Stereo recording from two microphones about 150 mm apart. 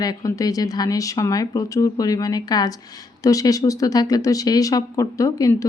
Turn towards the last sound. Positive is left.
turn(degrees=20)  # may be behind; listen again after turning